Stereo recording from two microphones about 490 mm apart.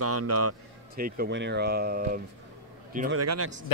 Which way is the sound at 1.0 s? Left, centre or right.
Centre.